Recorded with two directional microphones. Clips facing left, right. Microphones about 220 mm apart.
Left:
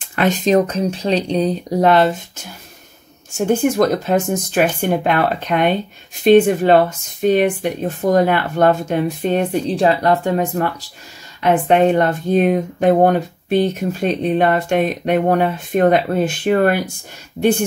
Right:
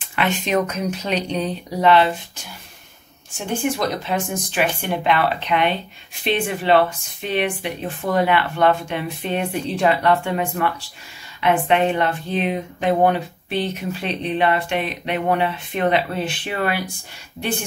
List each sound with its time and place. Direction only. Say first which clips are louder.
0.1 s speech: left 6 dB; 40° left (ahead or behind)
3.3 s speech: left 8 dB; 45° left (ahead or behind)